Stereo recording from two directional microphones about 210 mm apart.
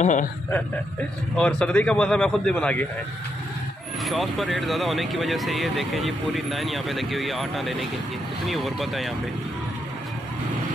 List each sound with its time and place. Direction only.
0.0 s a sound: 35° left (ahead or behind)
1.3 s speech: 5° left (ahead or behind)
4.0 s speech: centre (ahead or behind)